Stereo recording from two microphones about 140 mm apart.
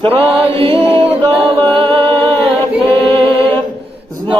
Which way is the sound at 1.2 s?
35° right (ahead or behind).